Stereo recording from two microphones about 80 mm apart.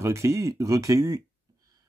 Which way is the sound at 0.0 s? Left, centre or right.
Right.